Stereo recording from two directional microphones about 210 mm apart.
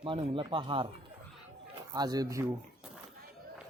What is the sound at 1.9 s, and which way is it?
Speech, 20° right (ahead or behind).